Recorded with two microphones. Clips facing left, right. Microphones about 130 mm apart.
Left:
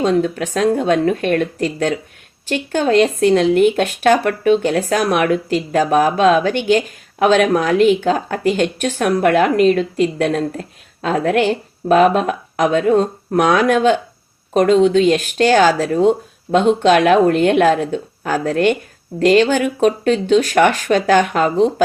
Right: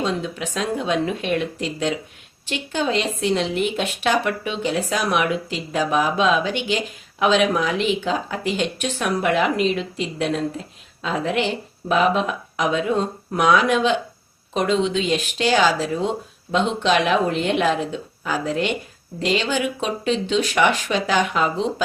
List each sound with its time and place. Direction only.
0.0 s speech: 50° left (ahead or behind)